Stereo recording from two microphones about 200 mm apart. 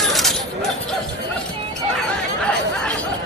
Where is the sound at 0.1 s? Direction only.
Centre (ahead or behind).